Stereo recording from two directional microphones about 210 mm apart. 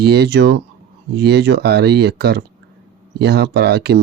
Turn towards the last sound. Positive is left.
turn(degrees=-50)  # may be behind; listen again after turning